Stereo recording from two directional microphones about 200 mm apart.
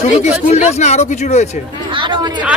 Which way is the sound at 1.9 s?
25° right (ahead or behind).